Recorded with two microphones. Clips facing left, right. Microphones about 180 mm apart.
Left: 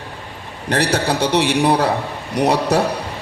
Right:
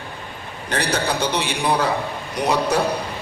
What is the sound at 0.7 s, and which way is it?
A man's voice, 65° left (ahead or behind).